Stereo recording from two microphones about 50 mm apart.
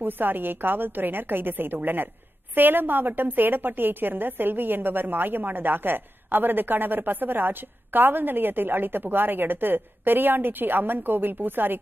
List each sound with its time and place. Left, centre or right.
0.0 s a woman's voice: right